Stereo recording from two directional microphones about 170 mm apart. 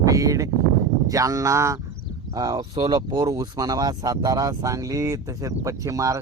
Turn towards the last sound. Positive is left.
turn(degrees=-20)  # may be behind; listen again after turning